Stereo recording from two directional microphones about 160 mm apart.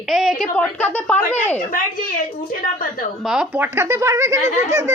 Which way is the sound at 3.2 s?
5° right (ahead or behind).